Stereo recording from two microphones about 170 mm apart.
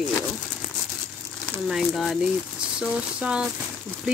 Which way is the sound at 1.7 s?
Centre (ahead or behind).